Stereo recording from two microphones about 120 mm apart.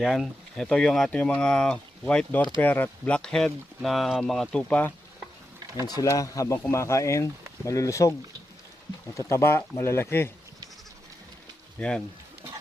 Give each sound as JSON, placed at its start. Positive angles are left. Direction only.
{"t": 0.0, "sound": "speech", "side_deg": 0}
{"t": 5.8, "sound": "speech", "side_deg": 30}
{"t": 9.1, "sound": "speech", "side_deg": 20}
{"t": 11.8, "sound": "speech", "side_deg": 10}